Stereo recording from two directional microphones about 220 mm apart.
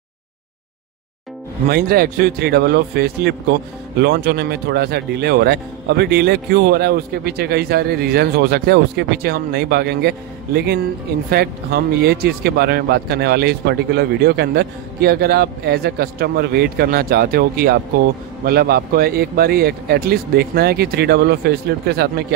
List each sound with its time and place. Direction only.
1.7 s a man's voice: 45° right (ahead or behind)